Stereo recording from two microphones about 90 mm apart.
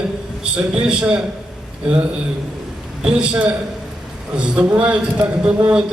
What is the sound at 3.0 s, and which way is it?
A man's voice, 10° right (ahead or behind).